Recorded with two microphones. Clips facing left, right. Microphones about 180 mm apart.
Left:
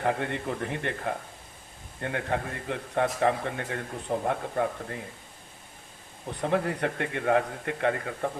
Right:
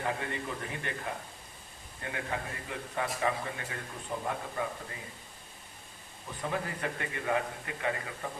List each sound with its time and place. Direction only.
0.0 s a man's voice: 65° left (ahead or behind)
6.4 s a man's voice: 65° left (ahead or behind)